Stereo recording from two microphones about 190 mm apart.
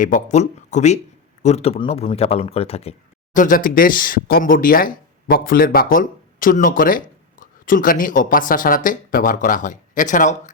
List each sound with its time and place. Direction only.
0.0 s speech: 40° left (ahead or behind)
3.3 s speech: 45° left (ahead or behind)